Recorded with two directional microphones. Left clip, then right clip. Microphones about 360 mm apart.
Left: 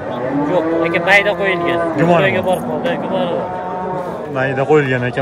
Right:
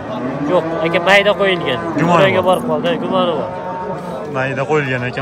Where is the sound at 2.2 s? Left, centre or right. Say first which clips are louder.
Right 2 dB; right.